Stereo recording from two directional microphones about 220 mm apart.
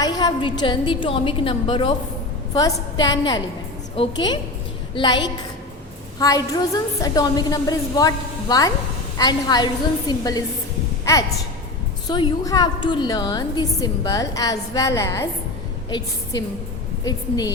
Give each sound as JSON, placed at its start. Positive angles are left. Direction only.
{"t": 0.0, "sound": "a woman's voice", "side_deg": 20}
{"t": 12.0, "sound": "a woman's voice", "side_deg": 20}